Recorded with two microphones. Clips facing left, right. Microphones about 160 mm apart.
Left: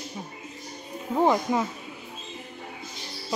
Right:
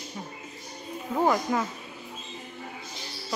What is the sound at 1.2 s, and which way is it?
Speech, 20° left (ahead or behind).